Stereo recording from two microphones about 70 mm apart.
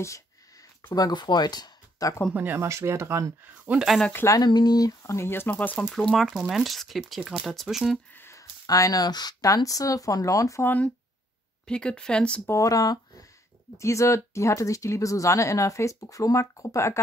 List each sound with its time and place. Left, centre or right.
0.9 s speech: left
2.3 s speech: right
2.6 s speech: right
3.7 s speech: right
4.4 s speech: left
5.0 s speech: left
5.9 s speech: centre
6.2 s speech: centre
8.1 s a sound: left
8.4 s speech: left
9.5 s speech: left
11.6 s speech: centre
12.4 s speech: left
13.7 s speech: left